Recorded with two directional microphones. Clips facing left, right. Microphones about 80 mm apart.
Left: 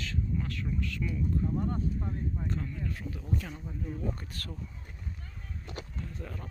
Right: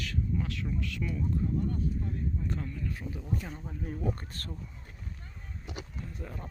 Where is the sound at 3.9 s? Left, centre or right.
Right.